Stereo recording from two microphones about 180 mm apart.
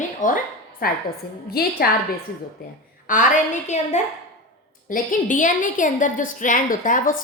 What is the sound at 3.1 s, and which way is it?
A woman's voice, 45° left (ahead or behind).